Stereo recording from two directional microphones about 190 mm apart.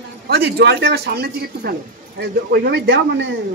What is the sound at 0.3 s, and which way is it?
Speech, 60° right (ahead or behind).